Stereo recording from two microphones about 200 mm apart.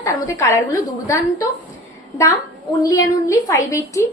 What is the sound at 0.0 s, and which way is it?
A woman's voice, 15° left (ahead or behind).